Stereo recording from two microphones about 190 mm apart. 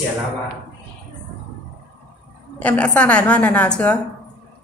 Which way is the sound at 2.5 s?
5° left (ahead or behind).